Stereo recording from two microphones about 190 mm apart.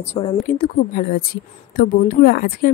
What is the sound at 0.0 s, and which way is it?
Speech, 35° left (ahead or behind).